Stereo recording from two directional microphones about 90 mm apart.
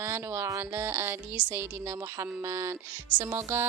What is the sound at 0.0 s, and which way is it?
A woman's voice, 30° right (ahead or behind).